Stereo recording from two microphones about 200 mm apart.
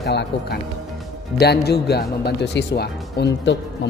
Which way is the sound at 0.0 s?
55° left (ahead or behind).